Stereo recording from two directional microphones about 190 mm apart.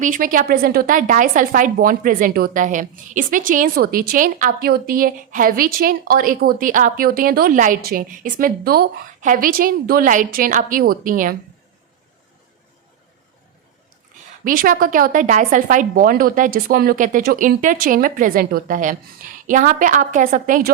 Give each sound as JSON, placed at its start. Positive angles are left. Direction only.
{"t": 0.0, "sound": "a woman's voice", "side_deg": -45}
{"t": 14.4, "sound": "a woman's voice", "side_deg": -45}